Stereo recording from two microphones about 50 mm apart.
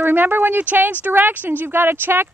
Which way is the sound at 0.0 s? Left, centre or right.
Right.